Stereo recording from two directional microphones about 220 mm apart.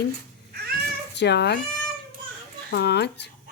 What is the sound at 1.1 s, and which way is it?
Speech, 50° left (ahead or behind).